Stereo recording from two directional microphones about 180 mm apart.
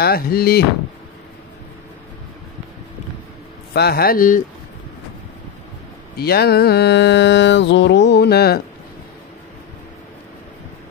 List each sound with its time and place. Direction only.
0.0 s speech: 60° left (ahead or behind)
3.7 s speech: 60° left (ahead or behind)
6.1 s mantra: 60° left (ahead or behind)